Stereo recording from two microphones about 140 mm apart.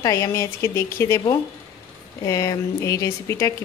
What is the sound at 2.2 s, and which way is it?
A woman's voice, 25° left (ahead or behind).